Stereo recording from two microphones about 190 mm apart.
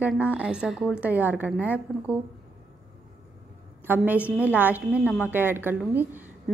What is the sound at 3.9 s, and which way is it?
A woman's voice, 10° right (ahead or behind).